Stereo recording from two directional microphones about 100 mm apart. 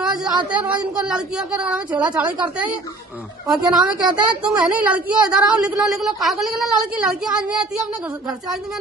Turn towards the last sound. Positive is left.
turn(degrees=-5)  # may be behind; listen again after turning